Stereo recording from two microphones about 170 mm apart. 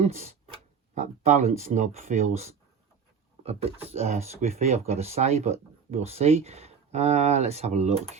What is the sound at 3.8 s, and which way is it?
Speech, 40° right (ahead or behind).